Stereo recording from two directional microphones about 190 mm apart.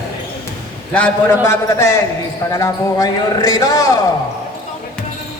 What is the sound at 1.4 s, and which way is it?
A man's voice, 15° left (ahead or behind).